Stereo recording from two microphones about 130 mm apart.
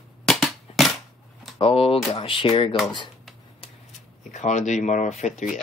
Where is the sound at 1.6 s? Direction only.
45° left (ahead or behind).